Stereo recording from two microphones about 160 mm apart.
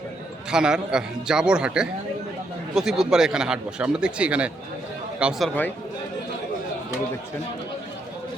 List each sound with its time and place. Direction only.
0.5 s speech: 5° right (ahead or behind)